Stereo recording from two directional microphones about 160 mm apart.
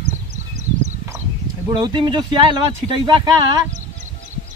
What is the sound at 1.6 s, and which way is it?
Speech, 25° right (ahead or behind).